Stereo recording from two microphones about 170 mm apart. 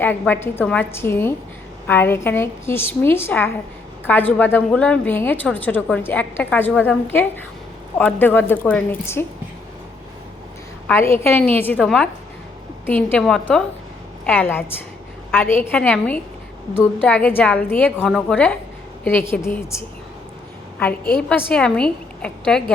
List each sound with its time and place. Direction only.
0.0 s a woman's voice: 10° left (ahead or behind)
10.8 s a woman's voice: 15° left (ahead or behind)
21.2 s a woman's voice: 5° left (ahead or behind)